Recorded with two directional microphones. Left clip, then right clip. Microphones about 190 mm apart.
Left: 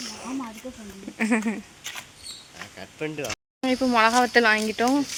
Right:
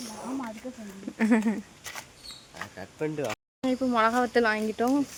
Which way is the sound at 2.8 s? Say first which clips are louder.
Even; 35° right (ahead or behind).